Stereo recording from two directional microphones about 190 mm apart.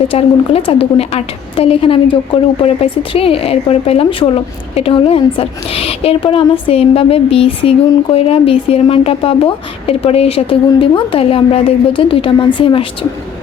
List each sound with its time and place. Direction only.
0.1 s a woman's voice: 30° left (ahead or behind)